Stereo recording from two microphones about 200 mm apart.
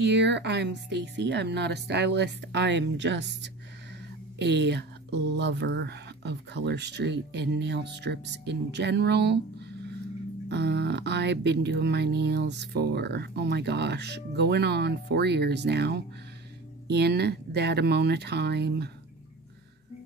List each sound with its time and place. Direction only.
0.0 s speech: 60° right (ahead or behind)
10.5 s speech: 55° right (ahead or behind)